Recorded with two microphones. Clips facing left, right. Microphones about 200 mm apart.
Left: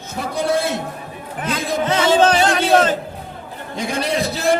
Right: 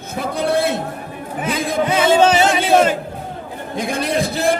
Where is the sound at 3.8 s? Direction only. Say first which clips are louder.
Right 1 dB; 55° right (ahead or behind).